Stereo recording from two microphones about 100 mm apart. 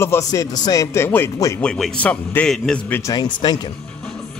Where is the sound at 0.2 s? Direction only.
35° left (ahead or behind).